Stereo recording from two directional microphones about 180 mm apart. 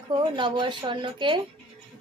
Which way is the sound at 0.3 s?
25° right (ahead or behind).